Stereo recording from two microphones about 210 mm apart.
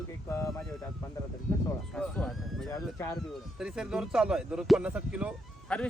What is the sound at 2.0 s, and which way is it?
Speech, 5° left (ahead or behind).